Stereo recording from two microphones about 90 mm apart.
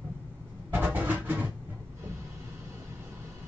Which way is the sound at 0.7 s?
20° right (ahead or behind).